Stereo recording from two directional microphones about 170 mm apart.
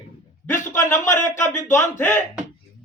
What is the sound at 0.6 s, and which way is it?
A man's voice, 15° left (ahead or behind).